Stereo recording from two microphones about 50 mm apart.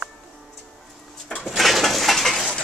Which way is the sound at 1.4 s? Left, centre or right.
Centre.